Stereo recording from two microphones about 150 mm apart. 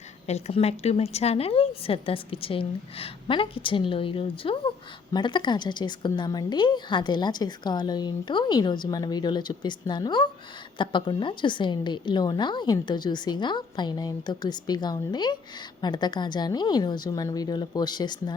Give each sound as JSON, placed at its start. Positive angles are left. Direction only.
{"t": 0.3, "sound": "a woman's voice", "side_deg": 45}